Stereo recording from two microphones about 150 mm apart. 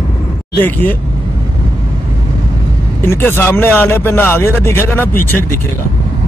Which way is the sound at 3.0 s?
15° left (ahead or behind).